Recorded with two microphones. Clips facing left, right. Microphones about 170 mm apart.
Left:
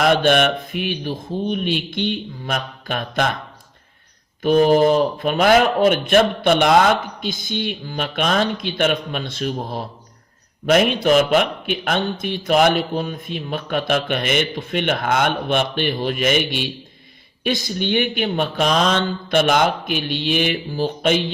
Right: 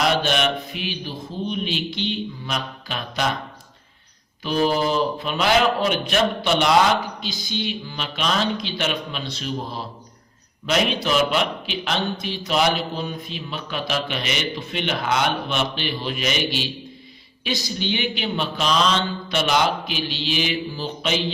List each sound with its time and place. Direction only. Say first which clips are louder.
0.0 s a man's voice: left 5 dB; 50° left (ahead or behind)
4.4 s a man's voice: left 7 dB; 50° left (ahead or behind)